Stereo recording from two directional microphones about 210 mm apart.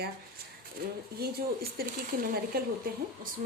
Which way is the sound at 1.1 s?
45° right (ahead or behind).